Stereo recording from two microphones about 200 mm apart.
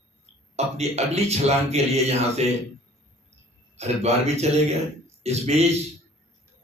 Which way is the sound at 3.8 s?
30° right (ahead or behind).